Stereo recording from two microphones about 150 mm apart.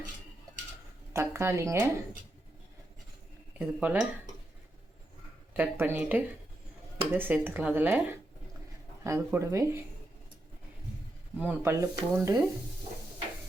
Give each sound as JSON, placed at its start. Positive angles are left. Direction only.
{"t": 1.1, "sound": "speech", "side_deg": -15}
{"t": 3.6, "sound": "speech", "side_deg": -10}
{"t": 5.5, "sound": "speech", "side_deg": -15}
{"t": 11.3, "sound": "speech", "side_deg": -15}